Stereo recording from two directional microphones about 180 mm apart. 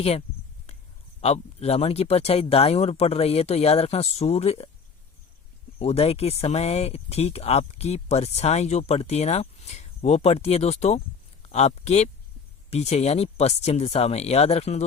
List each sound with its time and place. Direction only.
0.0 s speech: 35° left (ahead or behind)
0.7 s a sound: 35° left (ahead or behind)
1.2 s speech: 35° left (ahead or behind)
5.8 s speech: 35° left (ahead or behind)